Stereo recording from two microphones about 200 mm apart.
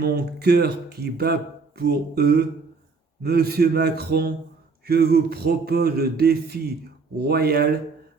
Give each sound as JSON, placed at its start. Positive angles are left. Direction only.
{"t": 0.0, "sound": "speech", "side_deg": -50}